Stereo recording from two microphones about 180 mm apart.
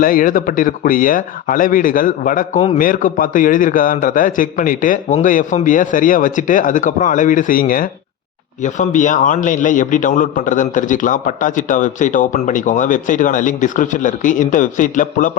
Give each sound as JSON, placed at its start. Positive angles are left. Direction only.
{"t": 0.0, "sound": "a man's voice", "side_deg": 50}